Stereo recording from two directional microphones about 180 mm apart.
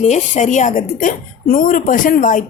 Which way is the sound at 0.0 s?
40° left (ahead or behind).